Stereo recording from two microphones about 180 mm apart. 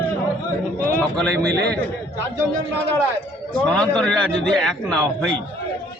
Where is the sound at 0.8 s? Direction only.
10° left (ahead or behind).